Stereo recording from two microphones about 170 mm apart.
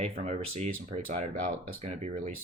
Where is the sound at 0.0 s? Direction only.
40° right (ahead or behind).